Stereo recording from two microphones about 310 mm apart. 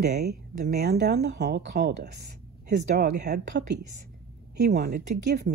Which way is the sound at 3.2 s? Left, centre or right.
Right.